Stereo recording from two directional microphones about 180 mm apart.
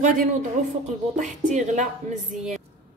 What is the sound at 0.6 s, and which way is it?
A woman's voice, 40° right (ahead or behind).